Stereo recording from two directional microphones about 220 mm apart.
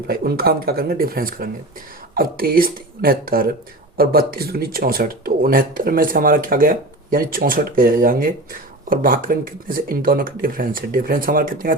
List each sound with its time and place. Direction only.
0.1 s speech: 45° right (ahead or behind)